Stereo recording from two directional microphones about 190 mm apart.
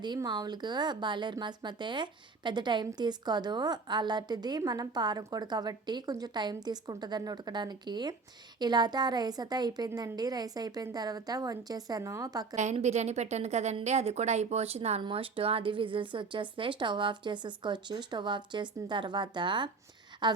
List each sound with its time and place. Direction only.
0.0 s a woman's voice: 25° right (ahead or behind)
12.5 s a woman's voice: 35° right (ahead or behind)